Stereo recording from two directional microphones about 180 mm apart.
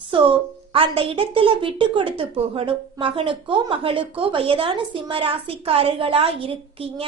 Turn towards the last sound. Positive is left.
turn(degrees=-30)  # may be behind; listen again after turning